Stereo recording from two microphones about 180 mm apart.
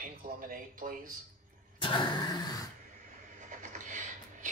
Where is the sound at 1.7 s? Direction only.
25° left (ahead or behind).